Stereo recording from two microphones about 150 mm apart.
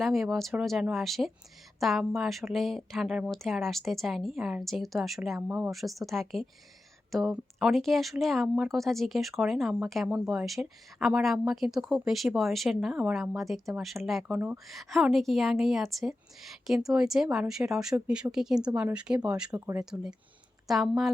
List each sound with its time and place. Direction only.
0.0 s speech: centre (ahead or behind)
5.4 s speech: 10° right (ahead or behind)
5.7 s speech: centre (ahead or behind)
14.3 s speech: 15° right (ahead or behind)
14.7 s speech: centre (ahead or behind)
19.5 s speech: 20° right (ahead or behind)
19.8 s speech: 5° right (ahead or behind)